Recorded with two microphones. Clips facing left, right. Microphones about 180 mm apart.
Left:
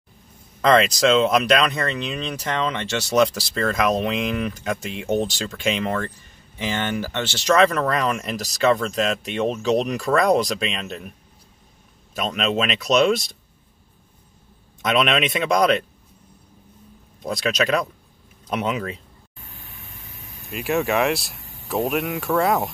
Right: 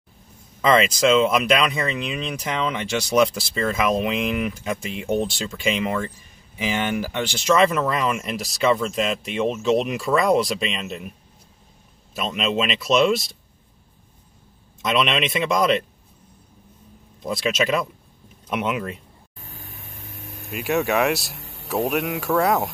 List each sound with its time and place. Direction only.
0.6 s speech: 5° right (ahead or behind)
12.2 s speech: 5° right (ahead or behind)
14.8 s speech: centre (ahead or behind)
17.2 s speech: 5° right (ahead or behind)
19.5 s vehicle: 40° right (ahead or behind); by 20.5 s 60° right (ahead or behind)
20.5 s speech: centre (ahead or behind)
21.4 s a sound: 75° right (ahead or behind)
21.6 s speech: centre (ahead or behind)